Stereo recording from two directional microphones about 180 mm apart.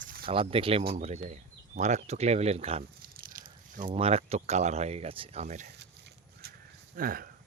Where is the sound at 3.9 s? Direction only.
35° right (ahead or behind).